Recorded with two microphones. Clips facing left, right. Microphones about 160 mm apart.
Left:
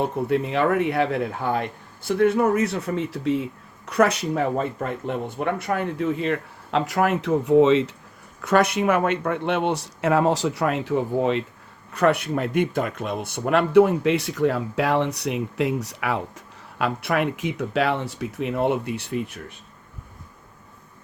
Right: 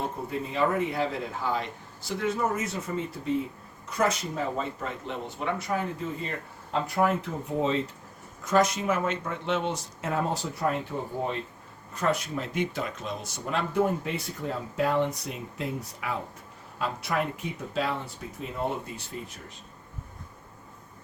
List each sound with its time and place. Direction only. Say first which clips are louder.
0.0 s speech: left 9 dB; 75° left (ahead or behind)
3.8 s speech: left 7 dB; 70° left (ahead or behind); by 7.9 s 90° left
8.4 s speech: left 4 dB; 65° left (ahead or behind); by 11.4 s 90° left
11.9 s speech: left 8 dB; 65° left (ahead or behind)